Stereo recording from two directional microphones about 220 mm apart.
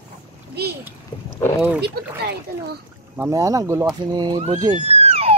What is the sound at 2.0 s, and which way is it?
Speech, 45° right (ahead or behind).